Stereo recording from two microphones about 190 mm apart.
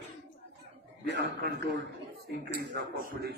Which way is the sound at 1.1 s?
60° right (ahead or behind).